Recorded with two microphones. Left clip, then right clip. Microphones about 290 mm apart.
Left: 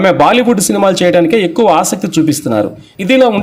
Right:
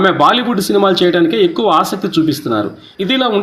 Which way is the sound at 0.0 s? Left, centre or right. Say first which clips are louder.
Left 3 dB; left.